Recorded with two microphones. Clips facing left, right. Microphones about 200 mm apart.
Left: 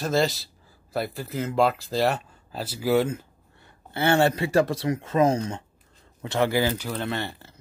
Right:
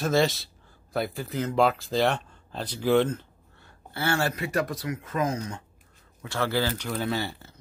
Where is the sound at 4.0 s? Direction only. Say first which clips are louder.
Left 6 dB; 25° left (ahead or behind).